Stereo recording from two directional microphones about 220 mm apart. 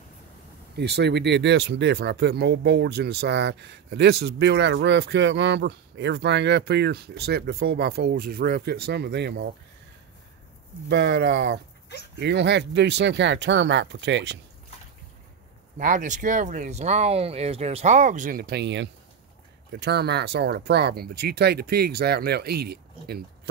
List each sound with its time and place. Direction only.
0.7 s speech: 50° right (ahead or behind)
10.9 s speech: 50° right (ahead or behind)
15.8 s speech: 35° right (ahead or behind)